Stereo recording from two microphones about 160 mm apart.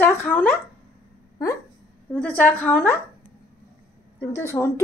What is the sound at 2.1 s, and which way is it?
Speech, 10° left (ahead or behind).